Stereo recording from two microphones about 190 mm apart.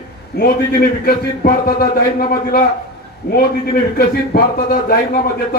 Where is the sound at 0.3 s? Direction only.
50° left (ahead or behind).